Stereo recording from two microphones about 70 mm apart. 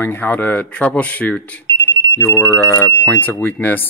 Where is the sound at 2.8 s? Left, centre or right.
Left.